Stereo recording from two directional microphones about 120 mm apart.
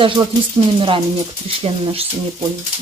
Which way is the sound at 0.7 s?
45° right (ahead or behind).